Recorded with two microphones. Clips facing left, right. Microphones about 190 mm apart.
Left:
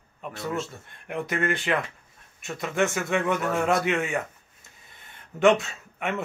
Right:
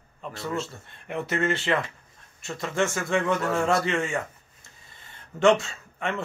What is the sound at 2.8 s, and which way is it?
A man's voice, centre (ahead or behind).